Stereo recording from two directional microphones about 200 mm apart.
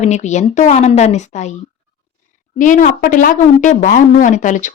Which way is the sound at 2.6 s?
40° left (ahead or behind).